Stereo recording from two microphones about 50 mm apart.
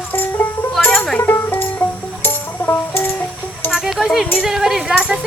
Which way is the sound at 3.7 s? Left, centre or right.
Centre.